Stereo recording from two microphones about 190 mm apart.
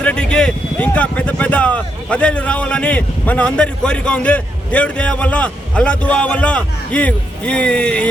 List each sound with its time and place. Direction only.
0.0 s speech: 5° left (ahead or behind)